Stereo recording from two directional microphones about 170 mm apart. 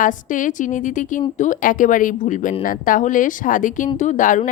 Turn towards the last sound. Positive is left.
turn(degrees=50)  # may be behind; listen again after turning